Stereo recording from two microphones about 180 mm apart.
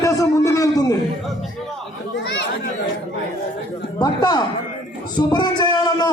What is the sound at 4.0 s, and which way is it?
Speech, 25° left (ahead or behind).